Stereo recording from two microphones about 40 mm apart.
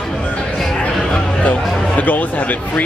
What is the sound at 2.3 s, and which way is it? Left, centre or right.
Speech, left.